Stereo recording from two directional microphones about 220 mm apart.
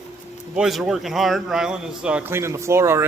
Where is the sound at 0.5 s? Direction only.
Centre (ahead or behind).